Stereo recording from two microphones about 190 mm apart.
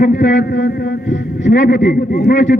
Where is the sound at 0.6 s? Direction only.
55° left (ahead or behind).